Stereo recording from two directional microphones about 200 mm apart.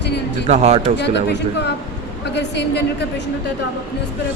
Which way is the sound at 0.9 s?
60° left (ahead or behind).